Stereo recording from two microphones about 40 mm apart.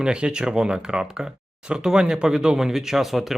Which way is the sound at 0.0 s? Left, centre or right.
Right.